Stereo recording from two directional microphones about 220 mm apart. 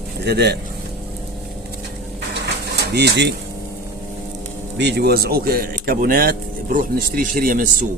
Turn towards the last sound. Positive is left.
turn(degrees=-40)  # may be behind; listen again after turning